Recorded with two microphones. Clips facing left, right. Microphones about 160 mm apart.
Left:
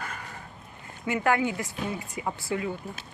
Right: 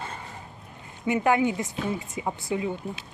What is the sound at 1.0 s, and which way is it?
Speech, 20° right (ahead or behind).